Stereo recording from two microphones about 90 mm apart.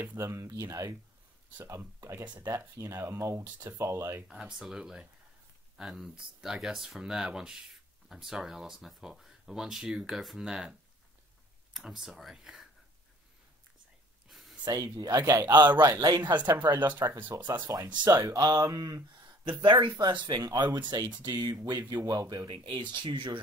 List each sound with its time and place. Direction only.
0.0 s speech: 30° right (ahead or behind)
1.6 s speech: 25° right (ahead or behind)
2.2 s speech: 15° right (ahead or behind)
2.7 s speech: 35° right (ahead or behind)
4.3 s speech: 5° right (ahead or behind)
14.3 s a sound: centre (ahead or behind)
14.6 s speech: 45° right (ahead or behind)
15.6 s speech: 50° right (ahead or behind)
16.3 s speech: 20° right (ahead or behind)
17.9 s speech: 45° right (ahead or behind)
19.6 s speech: 60° right (ahead or behind); by 22.5 s 40° right (ahead or behind)
22.5 s speech: 60° right (ahead or behind)